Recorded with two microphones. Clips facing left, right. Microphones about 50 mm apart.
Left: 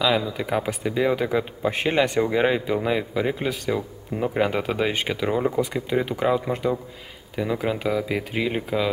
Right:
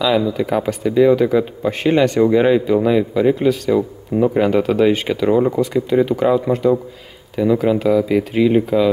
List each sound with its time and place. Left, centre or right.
0.0 s speech: centre